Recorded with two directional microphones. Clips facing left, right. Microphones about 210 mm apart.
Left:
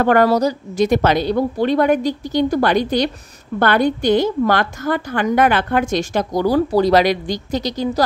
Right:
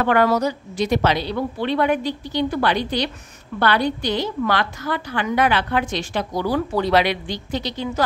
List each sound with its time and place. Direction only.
0.0 s a woman's voice: 45° left (ahead or behind)